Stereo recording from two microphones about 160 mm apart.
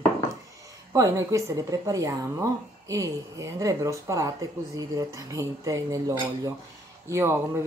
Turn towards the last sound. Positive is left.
turn(degrees=-15)  # may be behind; listen again after turning